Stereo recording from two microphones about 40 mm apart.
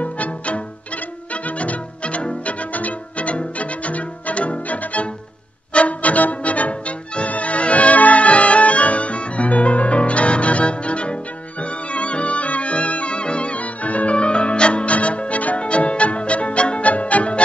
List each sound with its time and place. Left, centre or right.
0.0 s music: left